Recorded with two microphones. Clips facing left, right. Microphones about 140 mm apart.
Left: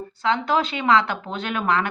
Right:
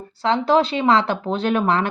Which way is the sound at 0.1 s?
35° right (ahead or behind).